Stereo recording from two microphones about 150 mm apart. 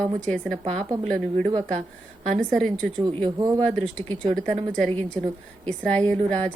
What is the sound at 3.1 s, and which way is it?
Speech, 35° right (ahead or behind).